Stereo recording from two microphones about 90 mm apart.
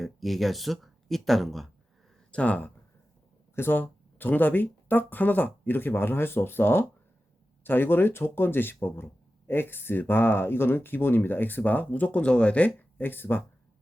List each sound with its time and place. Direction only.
0.0 s speech: centre (ahead or behind)
2.3 s speech: 15° left (ahead or behind)